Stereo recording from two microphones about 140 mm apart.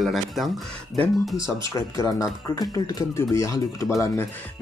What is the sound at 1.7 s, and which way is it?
Speech, 25° left (ahead or behind).